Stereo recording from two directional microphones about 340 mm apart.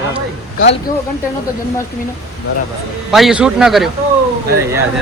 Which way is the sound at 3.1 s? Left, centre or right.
Centre.